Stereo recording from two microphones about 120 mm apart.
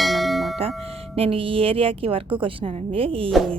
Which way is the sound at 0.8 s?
55° right (ahead or behind).